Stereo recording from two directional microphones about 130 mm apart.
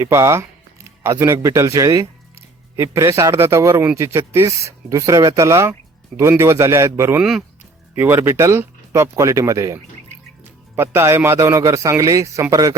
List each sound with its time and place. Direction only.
0.0 s a man's voice: 20° right (ahead or behind)
7.2 s speech: 5° right (ahead or behind)
7.9 s a man's voice: 20° right (ahead or behind)